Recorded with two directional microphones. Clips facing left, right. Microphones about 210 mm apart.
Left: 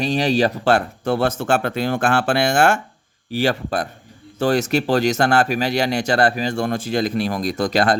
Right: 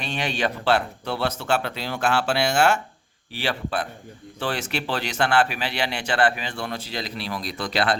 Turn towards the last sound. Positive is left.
turn(degrees=45)  # may be behind; listen again after turning